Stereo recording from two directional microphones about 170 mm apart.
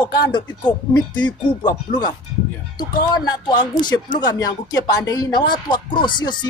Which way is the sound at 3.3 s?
25° left (ahead or behind).